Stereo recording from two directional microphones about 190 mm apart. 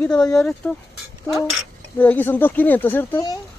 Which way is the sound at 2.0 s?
10° left (ahead or behind).